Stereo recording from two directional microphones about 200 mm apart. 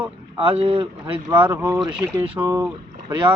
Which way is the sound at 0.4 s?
30° right (ahead or behind).